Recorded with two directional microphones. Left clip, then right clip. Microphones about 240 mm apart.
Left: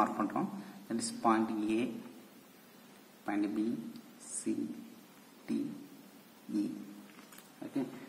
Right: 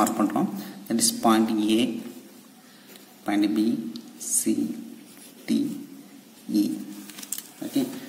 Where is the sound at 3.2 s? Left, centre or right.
Right.